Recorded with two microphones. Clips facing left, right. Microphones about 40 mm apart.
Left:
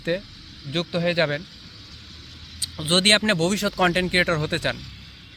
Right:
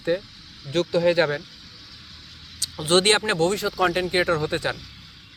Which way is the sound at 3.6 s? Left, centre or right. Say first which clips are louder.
Left 1 dB; left.